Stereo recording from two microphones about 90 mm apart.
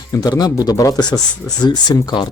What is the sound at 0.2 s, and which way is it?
Speech, 50° left (ahead or behind).